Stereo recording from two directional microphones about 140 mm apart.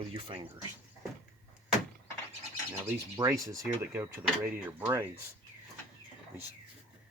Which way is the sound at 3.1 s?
25° right (ahead or behind).